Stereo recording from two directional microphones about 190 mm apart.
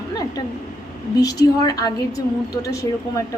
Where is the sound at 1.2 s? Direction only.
20° left (ahead or behind).